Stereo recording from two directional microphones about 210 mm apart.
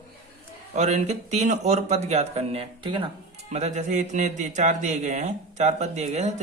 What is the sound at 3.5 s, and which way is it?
A man's voice, 35° right (ahead or behind).